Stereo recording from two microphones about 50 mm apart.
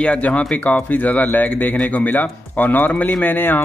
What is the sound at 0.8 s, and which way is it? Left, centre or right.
Speech, left.